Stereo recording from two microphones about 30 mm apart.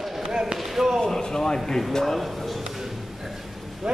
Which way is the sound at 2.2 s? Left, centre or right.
Centre.